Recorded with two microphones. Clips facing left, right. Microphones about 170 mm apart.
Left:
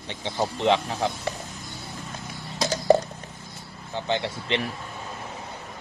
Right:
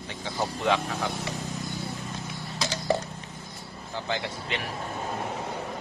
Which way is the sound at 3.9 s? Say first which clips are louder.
Left 4 dB; 25° left (ahead or behind).